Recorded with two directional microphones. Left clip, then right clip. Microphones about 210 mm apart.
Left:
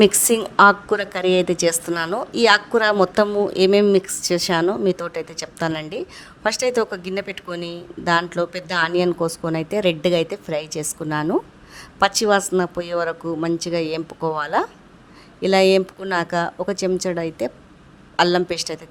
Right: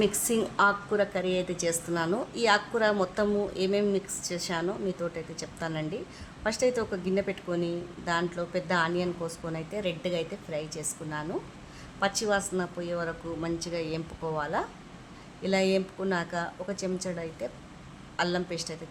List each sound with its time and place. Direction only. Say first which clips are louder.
0.0 s a woman's voice: left 11 dB; 45° left (ahead or behind)